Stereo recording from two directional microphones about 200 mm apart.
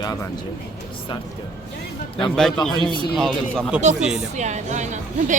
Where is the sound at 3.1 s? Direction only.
Centre (ahead or behind).